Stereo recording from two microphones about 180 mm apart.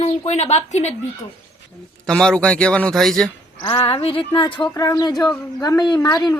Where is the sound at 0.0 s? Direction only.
40° left (ahead or behind).